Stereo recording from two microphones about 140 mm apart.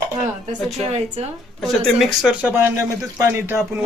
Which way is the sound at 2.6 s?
20° right (ahead or behind).